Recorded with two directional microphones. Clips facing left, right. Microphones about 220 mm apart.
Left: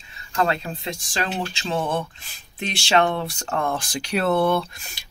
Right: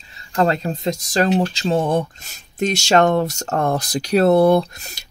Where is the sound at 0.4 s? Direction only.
40° right (ahead or behind).